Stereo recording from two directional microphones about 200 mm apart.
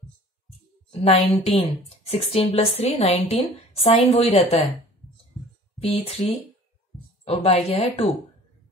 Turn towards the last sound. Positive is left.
turn(degrees=30)  # may be behind; listen again after turning